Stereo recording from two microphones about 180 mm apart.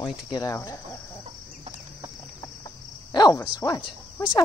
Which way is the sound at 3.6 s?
20° left (ahead or behind).